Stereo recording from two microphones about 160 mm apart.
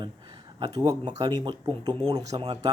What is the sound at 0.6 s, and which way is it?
Speech, 25° right (ahead or behind).